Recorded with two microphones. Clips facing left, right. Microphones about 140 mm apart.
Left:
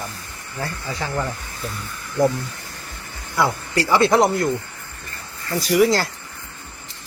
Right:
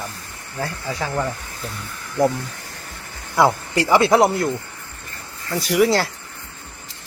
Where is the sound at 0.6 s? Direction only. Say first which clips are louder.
Right 2 dB; centre (ahead or behind).